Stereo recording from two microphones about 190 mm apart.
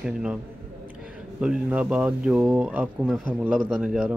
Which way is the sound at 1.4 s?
5° right (ahead or behind).